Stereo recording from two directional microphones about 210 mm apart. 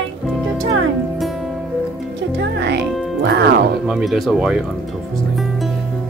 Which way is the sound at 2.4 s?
55° right (ahead or behind).